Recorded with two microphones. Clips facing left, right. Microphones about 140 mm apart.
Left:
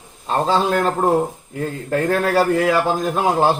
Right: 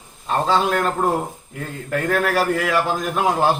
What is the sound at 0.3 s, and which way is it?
Speech, 30° left (ahead or behind).